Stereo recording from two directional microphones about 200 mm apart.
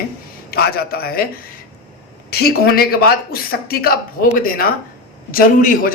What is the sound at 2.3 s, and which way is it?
Speech, 50° left (ahead or behind).